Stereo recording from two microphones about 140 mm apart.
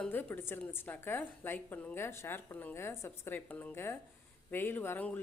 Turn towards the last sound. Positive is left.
turn(degrees=15)  # may be behind; listen again after turning